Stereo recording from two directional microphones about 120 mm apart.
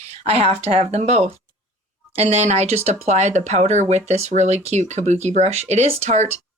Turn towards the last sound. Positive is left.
turn(degrees=-65)  # may be behind; listen again after turning